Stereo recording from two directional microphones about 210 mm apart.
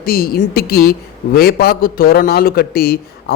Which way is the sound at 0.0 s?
45° left (ahead or behind).